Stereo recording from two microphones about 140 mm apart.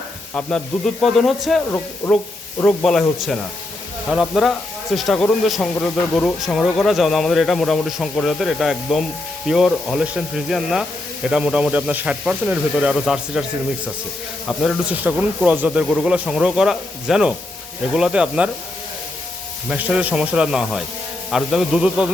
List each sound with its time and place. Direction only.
0.3 s speech: 5° left (ahead or behind)
2.0 s speech: 20° left (ahead or behind)
2.6 s speech: 5° left (ahead or behind)
14.4 s speech: centre (ahead or behind)
15.1 s speech: 10° right (ahead or behind)
19.6 s speech: 5° right (ahead or behind)